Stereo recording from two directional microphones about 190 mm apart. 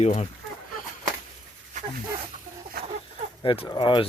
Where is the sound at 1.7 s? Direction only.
40° right (ahead or behind).